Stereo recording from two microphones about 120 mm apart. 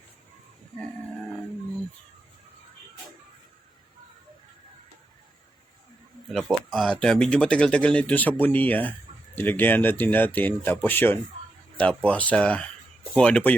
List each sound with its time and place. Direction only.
6.2 s speech: centre (ahead or behind)